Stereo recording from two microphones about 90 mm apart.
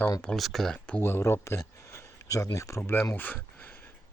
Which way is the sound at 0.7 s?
15° left (ahead or behind).